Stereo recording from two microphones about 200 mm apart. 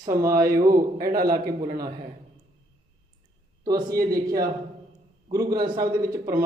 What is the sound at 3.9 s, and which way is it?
Speech, 45° right (ahead or behind).